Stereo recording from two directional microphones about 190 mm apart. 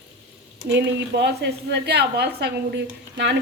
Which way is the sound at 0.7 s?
65° right (ahead or behind).